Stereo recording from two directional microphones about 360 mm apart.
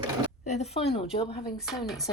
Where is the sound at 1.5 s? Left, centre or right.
Centre.